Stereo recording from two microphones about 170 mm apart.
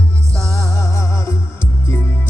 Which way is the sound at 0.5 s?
20° left (ahead or behind).